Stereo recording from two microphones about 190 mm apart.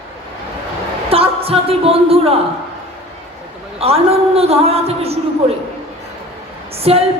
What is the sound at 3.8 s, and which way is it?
A woman's voice, 30° right (ahead or behind).